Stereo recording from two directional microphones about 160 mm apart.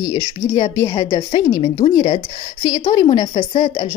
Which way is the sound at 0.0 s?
25° left (ahead or behind).